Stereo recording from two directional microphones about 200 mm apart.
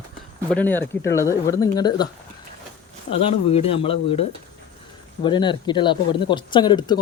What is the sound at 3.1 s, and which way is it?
Speech, 30° left (ahead or behind).